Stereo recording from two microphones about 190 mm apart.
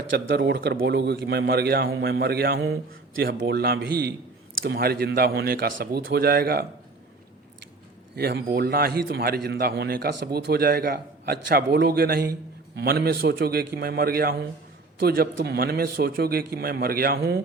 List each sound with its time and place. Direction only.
0.1 s a man's voice: 65° right (ahead or behind)
8.1 s a man's voice: 55° right (ahead or behind)